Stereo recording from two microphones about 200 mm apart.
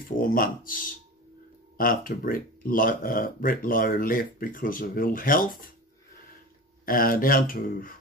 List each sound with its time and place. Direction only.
0.0 s speech: 45° left (ahead or behind)
6.9 s speech: 45° left (ahead or behind)